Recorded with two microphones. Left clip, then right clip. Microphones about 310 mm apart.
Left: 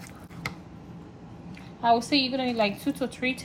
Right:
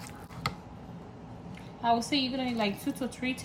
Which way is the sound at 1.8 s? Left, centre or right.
Centre.